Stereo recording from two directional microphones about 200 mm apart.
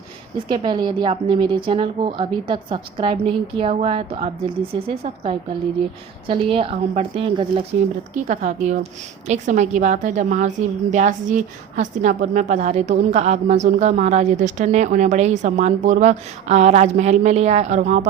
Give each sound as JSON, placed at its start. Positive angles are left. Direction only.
{"t": 0.3, "sound": "a woman's voice", "side_deg": -20}
{"t": 8.1, "sound": "a woman's voice", "side_deg": -40}